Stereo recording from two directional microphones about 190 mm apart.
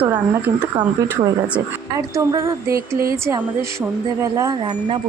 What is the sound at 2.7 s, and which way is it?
Speech, 50° right (ahead or behind).